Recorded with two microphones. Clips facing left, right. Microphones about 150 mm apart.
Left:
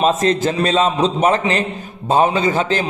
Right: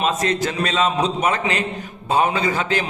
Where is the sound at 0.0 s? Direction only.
30° left (ahead or behind).